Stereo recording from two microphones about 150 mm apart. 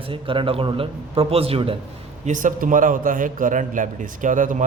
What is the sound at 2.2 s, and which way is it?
A man's voice, 60° right (ahead or behind).